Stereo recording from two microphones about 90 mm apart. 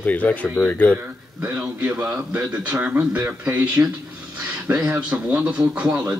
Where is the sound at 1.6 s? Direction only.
15° right (ahead or behind); by 5.0 s 30° right (ahead or behind).